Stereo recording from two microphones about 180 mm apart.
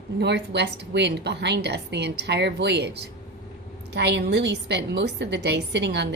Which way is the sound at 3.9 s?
70° right (ahead or behind).